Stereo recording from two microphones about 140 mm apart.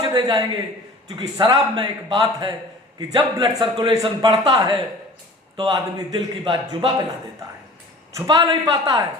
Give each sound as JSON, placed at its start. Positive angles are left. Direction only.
{"t": 0.0, "sound": "a man's voice", "side_deg": -30}
{"t": 8.1, "sound": "a man's voice", "side_deg": -25}